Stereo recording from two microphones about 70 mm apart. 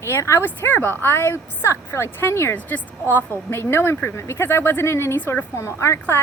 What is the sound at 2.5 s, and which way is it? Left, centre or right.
A woman's voice, left.